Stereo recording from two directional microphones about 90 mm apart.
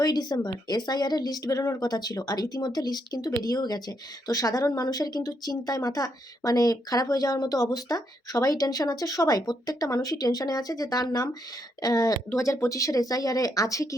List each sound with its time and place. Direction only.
0.0 s speech: 50° left (ahead or behind)
12.3 s speech: 30° left (ahead or behind)